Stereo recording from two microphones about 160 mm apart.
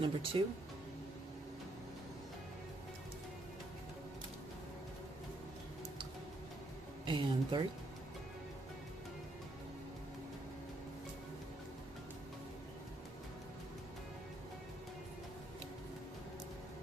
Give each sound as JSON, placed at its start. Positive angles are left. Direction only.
{"t": 0.0, "sound": "speech", "side_deg": -35}
{"t": 7.1, "sound": "speech", "side_deg": -30}